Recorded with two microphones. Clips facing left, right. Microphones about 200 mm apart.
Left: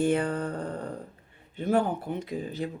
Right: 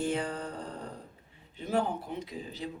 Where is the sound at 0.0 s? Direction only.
55° left (ahead or behind).